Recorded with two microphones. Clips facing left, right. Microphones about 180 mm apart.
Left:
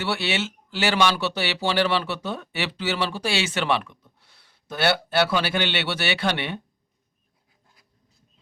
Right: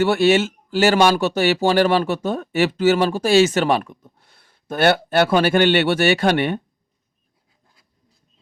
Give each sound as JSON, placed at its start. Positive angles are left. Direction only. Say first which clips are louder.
{"t": 0.0, "sound": "speech", "louder": "right 11 dB", "side_deg": -45}